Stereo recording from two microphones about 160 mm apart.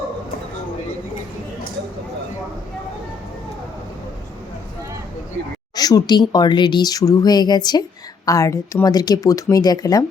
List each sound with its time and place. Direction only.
5.7 s speech: 25° left (ahead or behind)